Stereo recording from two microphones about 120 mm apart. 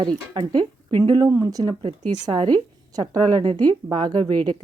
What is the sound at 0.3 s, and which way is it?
A woman's voice, 40° right (ahead or behind).